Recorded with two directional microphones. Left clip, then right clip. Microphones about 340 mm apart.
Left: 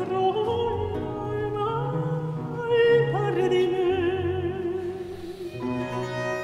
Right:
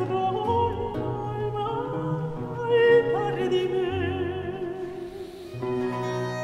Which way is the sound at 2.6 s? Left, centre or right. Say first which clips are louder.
Right 1 dB; left.